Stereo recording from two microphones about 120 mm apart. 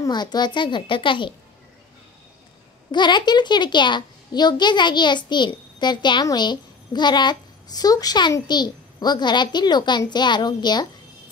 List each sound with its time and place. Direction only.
0.0 s a child's voice: 35° left (ahead or behind)
2.9 s a child's voice: 40° left (ahead or behind)